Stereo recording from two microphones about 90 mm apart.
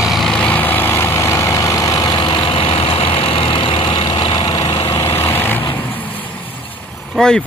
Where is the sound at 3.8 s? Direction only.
50° left (ahead or behind); by 6.3 s 20° left (ahead or behind).